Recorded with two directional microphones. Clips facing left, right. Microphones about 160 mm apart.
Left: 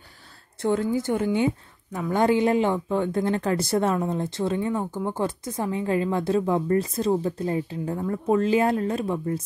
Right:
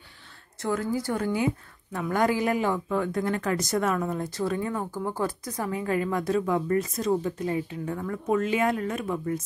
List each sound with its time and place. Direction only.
0.6 s a woman's voice: 25° left (ahead or behind)